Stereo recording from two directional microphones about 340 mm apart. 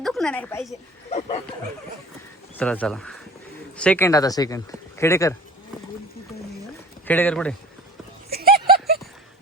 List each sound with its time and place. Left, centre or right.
0.0 s a woman's voice: centre
2.6 s speech: centre
7.1 s speech: centre
8.3 s a sound: right